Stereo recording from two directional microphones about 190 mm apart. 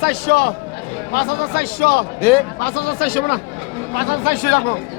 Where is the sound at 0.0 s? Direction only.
55° left (ahead or behind).